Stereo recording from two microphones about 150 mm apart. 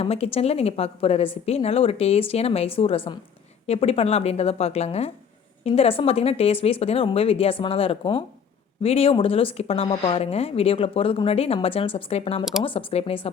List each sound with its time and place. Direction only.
0.0 s a woman's voice: 40° left (ahead or behind)